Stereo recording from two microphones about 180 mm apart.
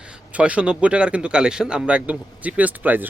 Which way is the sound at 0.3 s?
5° right (ahead or behind).